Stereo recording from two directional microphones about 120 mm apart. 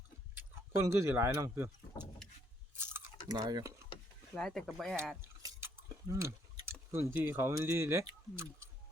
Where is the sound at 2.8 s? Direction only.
20° right (ahead or behind).